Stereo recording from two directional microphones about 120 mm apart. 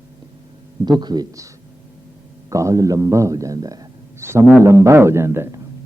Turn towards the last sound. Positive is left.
turn(degrees=-20)  # may be behind; listen again after turning